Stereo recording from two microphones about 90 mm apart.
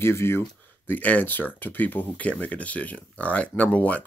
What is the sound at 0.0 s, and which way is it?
Speech, 30° left (ahead or behind).